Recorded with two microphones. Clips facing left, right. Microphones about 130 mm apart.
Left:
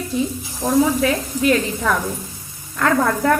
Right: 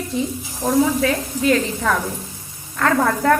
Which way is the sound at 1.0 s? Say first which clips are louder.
Left 1 dB; 15° left (ahead or behind).